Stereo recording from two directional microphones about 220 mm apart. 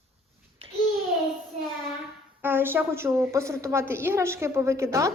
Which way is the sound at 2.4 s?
10° right (ahead or behind).